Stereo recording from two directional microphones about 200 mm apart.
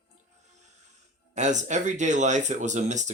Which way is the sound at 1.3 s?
35° right (ahead or behind).